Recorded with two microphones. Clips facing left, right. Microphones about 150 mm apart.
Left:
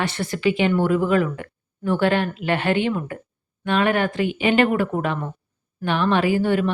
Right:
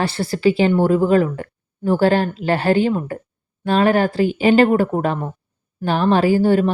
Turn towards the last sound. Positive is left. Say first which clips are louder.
# right 5 dB
turn(degrees=-35)  # may be behind; listen again after turning